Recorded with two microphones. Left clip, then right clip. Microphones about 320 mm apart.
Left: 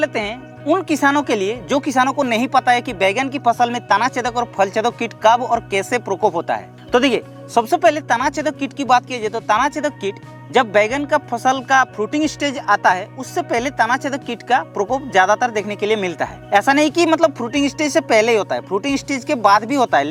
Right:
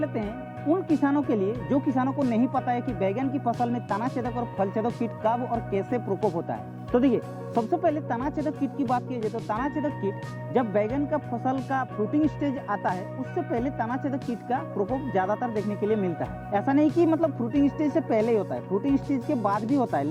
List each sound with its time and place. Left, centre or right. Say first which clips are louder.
0.0 s speech: left 10 dB; centre
6.2 s speech: left 12 dB; centre
6.9 s speech: left 8 dB; centre